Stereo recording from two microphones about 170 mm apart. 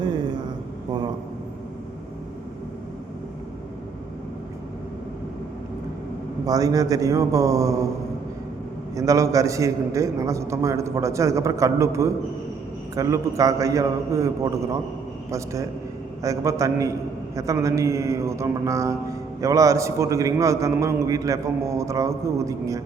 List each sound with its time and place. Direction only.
6.4 s a man's voice: 20° right (ahead or behind)
9.0 s a man's voice: 20° right (ahead or behind)
16.2 s a man's voice: 20° right (ahead or behind)